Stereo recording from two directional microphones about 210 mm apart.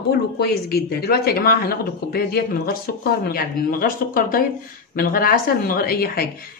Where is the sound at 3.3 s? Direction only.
40° left (ahead or behind).